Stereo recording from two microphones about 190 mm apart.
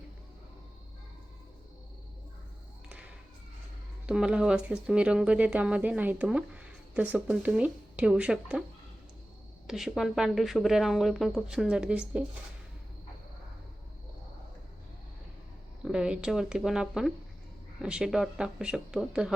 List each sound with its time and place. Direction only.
4.0 s speech: 5° right (ahead or behind)
9.6 s speech: centre (ahead or behind)
15.8 s speech: 5° right (ahead or behind)